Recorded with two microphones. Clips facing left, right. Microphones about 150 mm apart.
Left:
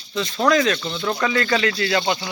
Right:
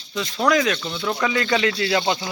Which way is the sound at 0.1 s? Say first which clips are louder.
Left 1 dB; 5° right (ahead or behind).